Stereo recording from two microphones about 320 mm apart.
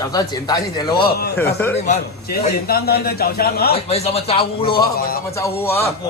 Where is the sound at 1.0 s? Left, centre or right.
Left.